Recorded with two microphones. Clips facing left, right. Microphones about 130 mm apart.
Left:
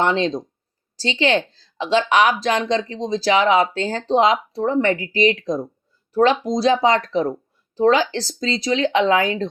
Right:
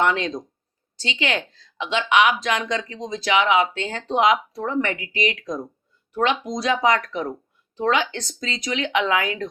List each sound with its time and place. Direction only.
0.0 s speech: 30° left (ahead or behind)